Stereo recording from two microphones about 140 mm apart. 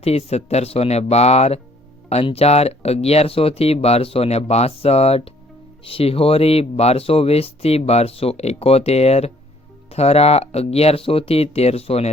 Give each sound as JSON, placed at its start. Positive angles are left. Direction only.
{"t": 0.0, "sound": "speech", "side_deg": 50}